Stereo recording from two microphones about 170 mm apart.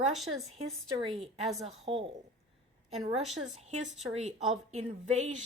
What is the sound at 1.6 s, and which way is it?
Speech, 35° right (ahead or behind).